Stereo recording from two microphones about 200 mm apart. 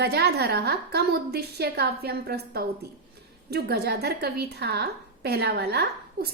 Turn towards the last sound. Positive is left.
turn(degrees=-55)  # may be behind; listen again after turning